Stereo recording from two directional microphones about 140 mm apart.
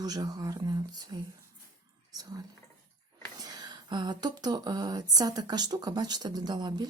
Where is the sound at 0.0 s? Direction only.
30° right (ahead or behind).